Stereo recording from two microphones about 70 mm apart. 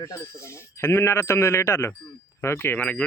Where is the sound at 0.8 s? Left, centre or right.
Left.